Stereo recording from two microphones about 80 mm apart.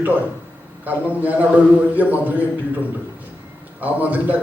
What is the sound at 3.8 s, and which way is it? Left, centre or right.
Speech, centre.